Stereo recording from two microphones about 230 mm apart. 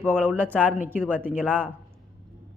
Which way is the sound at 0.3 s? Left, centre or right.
Centre.